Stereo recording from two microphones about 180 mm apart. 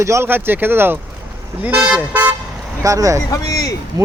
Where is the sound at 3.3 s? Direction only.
20° left (ahead or behind).